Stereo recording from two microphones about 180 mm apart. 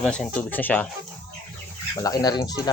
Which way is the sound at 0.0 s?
5° left (ahead or behind).